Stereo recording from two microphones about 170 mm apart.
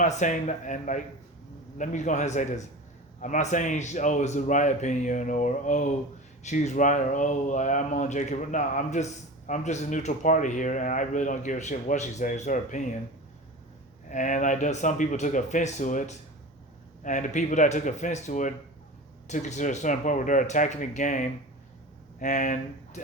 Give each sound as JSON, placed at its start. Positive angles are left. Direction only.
{"t": 0.0, "sound": "speech", "side_deg": 45}
{"t": 14.1, "sound": "speech", "side_deg": 45}